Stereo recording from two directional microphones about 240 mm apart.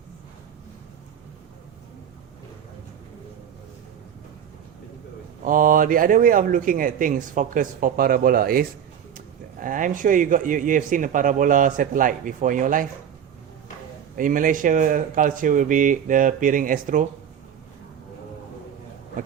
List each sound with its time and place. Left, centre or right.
5.5 s speech: right
14.2 s speech: right